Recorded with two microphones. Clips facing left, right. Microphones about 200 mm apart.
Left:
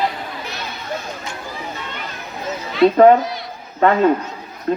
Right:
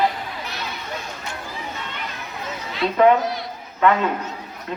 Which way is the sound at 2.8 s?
40° left (ahead or behind).